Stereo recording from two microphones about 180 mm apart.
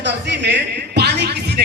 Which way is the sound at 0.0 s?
75° right (ahead or behind).